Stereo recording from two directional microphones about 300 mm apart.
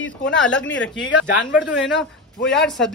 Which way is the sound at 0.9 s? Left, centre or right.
Left.